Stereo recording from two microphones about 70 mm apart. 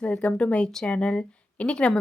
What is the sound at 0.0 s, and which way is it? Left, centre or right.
Speech, centre.